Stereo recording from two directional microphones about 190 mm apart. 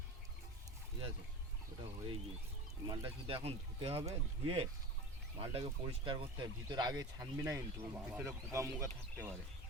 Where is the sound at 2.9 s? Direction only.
30° right (ahead or behind).